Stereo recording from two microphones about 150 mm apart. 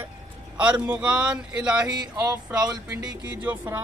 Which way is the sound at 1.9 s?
25° right (ahead or behind).